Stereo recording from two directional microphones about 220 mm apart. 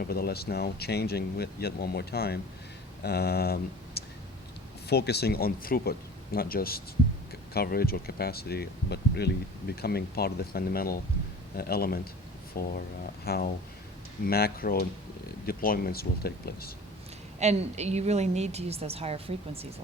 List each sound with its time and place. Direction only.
0.1 s speech: 45° left (ahead or behind)
17.4 s a woman's voice: 30° right (ahead or behind)